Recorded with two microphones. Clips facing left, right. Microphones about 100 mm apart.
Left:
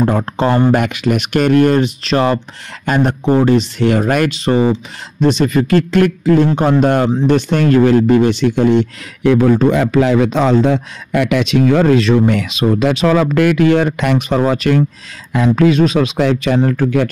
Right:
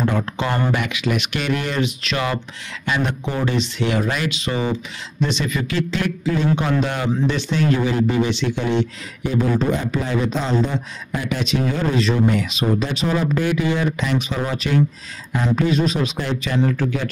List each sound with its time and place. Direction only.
0.0 s a man's voice: 40° left (ahead or behind)
9.2 s speech: 75° left (ahead or behind); by 14.8 s 60° left (ahead or behind)
15.3 s speech: 90° left; by 17.1 s 60° left (ahead or behind)